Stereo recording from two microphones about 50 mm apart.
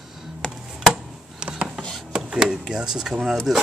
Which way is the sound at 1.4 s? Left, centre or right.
Right.